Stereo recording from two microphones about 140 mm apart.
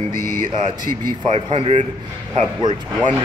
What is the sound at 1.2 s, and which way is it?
Speech, 40° right (ahead or behind).